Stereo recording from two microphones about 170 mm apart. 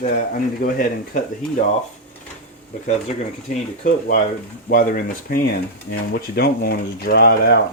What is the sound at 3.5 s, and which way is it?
Speech, 45° left (ahead or behind).